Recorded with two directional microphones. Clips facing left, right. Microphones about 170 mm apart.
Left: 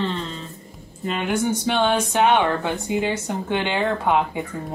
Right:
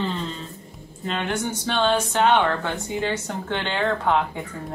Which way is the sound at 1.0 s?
10° left (ahead or behind).